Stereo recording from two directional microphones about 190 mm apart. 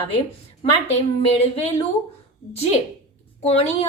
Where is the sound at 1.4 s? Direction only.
35° left (ahead or behind).